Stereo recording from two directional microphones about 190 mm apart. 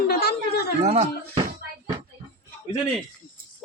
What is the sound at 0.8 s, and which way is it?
Speech, 35° right (ahead or behind).